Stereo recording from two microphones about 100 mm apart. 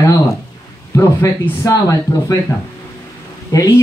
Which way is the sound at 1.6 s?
35° left (ahead or behind).